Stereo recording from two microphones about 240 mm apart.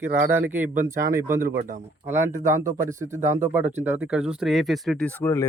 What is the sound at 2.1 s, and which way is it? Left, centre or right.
Speech, centre.